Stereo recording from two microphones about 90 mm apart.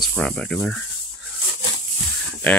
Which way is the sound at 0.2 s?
10° left (ahead or behind).